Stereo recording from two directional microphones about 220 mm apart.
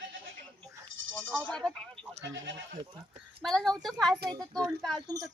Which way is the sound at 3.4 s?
Centre (ahead or behind).